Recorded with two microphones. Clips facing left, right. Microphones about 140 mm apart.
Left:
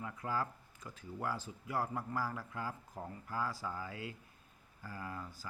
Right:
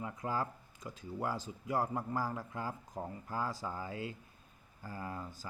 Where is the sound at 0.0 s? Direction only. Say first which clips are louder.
Right 2 dB; 20° right (ahead or behind).